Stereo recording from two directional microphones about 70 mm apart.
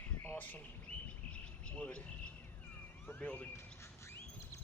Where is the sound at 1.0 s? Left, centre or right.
Centre.